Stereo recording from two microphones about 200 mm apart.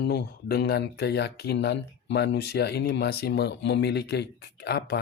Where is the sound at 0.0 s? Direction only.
55° left (ahead or behind).